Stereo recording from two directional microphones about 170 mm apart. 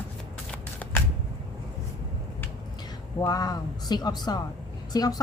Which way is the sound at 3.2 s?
20° left (ahead or behind).